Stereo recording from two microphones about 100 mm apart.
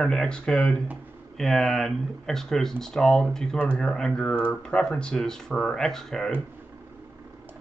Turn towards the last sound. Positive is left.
turn(degrees=5)  # may be behind; listen again after turning